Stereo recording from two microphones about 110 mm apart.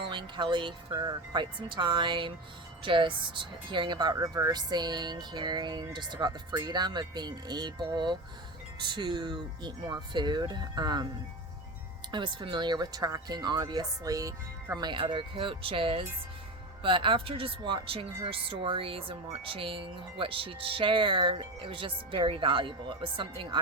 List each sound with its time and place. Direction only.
0.0 s speech: 45° right (ahead or behind)
12.1 s speech: 45° right (ahead or behind); by 14.8 s 30° right (ahead or behind)
14.8 s speech: 45° right (ahead or behind)